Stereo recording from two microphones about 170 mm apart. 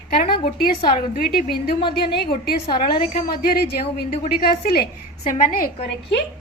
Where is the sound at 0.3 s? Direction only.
30° left (ahead or behind).